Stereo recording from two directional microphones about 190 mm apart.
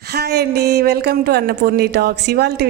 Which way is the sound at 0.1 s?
60° right (ahead or behind).